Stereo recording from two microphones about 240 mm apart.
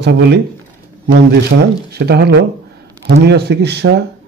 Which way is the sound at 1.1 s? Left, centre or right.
Right.